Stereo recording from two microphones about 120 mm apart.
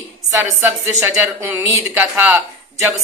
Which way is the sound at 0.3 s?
20° right (ahead or behind).